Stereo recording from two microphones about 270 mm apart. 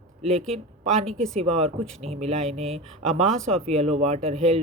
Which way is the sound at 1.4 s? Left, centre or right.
Right.